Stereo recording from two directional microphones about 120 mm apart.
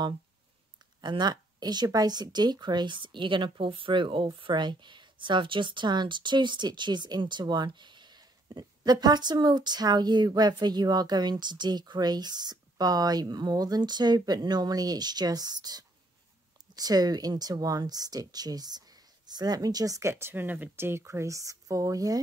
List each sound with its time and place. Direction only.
1.0 s speech: 40° right (ahead or behind)